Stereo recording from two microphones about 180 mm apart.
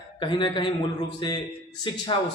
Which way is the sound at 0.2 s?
25° left (ahead or behind).